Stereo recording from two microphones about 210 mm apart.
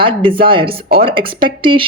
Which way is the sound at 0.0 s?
25° right (ahead or behind).